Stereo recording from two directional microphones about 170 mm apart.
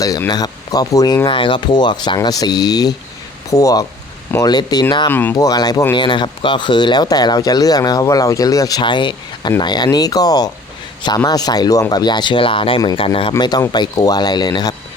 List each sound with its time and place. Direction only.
0.0 s speech: 20° left (ahead or behind)